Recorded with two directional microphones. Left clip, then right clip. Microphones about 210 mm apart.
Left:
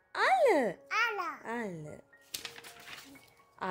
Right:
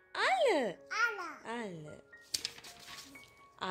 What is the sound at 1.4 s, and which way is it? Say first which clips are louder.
Music: left 3 dB; 10° left (ahead or behind).